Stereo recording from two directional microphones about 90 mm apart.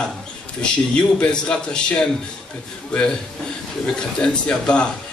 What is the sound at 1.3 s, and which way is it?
Speech, 10° left (ahead or behind).